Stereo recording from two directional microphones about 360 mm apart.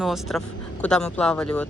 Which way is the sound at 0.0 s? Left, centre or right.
Centre.